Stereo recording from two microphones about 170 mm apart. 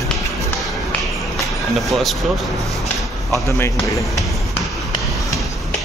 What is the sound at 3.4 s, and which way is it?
Speech, 15° left (ahead or behind).